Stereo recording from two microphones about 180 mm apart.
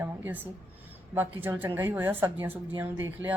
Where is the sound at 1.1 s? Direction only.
10° right (ahead or behind).